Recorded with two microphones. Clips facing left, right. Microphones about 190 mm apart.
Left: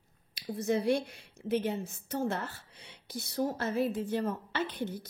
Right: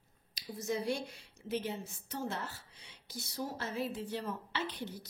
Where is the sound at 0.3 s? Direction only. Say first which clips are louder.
Left 6 dB; 60° left (ahead or behind).